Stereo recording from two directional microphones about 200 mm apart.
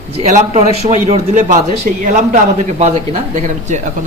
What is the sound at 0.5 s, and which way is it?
A man's voice, 35° right (ahead or behind).